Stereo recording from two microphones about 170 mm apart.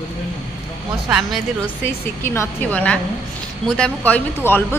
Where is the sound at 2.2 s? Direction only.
15° left (ahead or behind).